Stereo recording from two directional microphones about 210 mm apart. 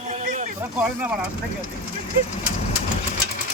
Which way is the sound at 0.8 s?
5° right (ahead or behind).